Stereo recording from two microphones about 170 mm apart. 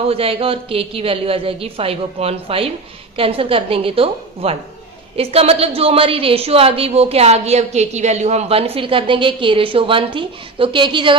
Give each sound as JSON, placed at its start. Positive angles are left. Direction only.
{"t": 0.1, "sound": "a woman's voice", "side_deg": -35}